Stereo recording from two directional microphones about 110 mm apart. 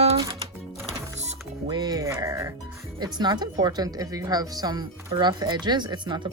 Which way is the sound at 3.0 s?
40° right (ahead or behind).